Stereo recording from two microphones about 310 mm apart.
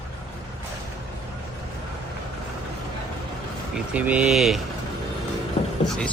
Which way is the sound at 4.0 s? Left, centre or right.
Centre.